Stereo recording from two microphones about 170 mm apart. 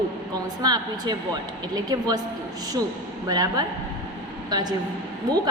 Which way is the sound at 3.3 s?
20° right (ahead or behind).